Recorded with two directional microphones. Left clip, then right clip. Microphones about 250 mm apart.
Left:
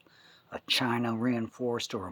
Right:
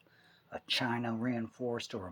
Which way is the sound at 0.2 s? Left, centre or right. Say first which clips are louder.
Left 3 dB; left.